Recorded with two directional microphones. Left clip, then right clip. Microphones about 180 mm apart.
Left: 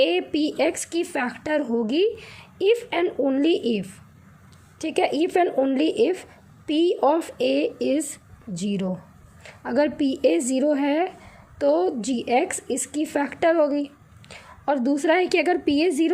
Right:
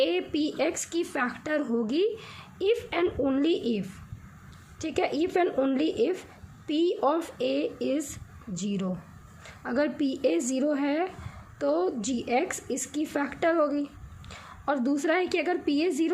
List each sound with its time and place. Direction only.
0.0 s a woman's voice: 20° left (ahead or behind)
5.7 s a woman's voice: 20° left (ahead or behind)